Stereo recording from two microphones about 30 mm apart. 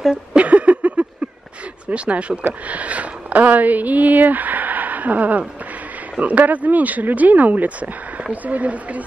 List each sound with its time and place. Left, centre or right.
0.3 s a sound: right
2.0 s speech: right
2.4 s speech: right